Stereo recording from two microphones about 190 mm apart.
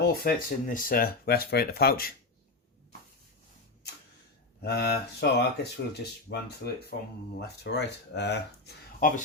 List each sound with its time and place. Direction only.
0.0 s speech: 55° left (ahead or behind)
4.6 s speech: 60° left (ahead or behind)